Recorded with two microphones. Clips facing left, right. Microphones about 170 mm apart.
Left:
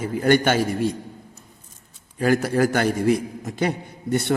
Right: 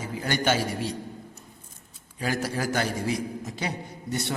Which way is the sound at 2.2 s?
55° left (ahead or behind).